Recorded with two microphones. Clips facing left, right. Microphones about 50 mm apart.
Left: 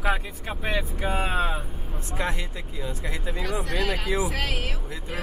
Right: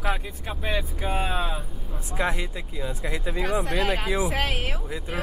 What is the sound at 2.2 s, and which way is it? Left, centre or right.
Speech, centre.